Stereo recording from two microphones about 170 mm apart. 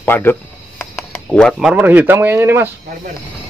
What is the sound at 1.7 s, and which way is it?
Speech, 10° right (ahead or behind).